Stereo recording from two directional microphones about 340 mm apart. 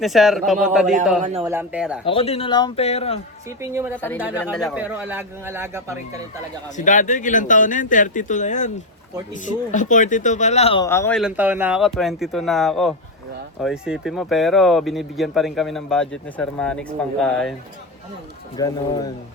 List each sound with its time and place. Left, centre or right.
0.0 s speech: centre
2.0 s a man's voice: centre
3.6 s a woman's voice: centre
3.9 s speech: centre
6.7 s speech: left; by 17.5 s centre
18.5 s a man's voice: centre